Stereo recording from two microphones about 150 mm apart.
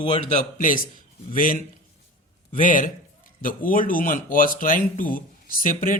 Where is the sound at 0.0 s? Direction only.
35° left (ahead or behind).